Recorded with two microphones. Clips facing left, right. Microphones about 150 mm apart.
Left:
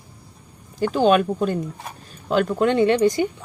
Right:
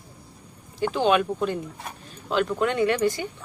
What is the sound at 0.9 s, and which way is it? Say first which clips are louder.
Speech: left 5 dB; 45° left (ahead or behind).